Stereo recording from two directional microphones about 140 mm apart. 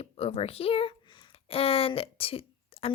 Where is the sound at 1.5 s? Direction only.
45° left (ahead or behind).